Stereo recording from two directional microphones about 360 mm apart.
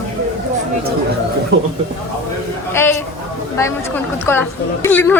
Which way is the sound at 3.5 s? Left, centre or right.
Centre.